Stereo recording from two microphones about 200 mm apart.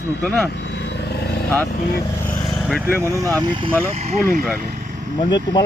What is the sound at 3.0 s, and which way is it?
Speech, 15° right (ahead or behind).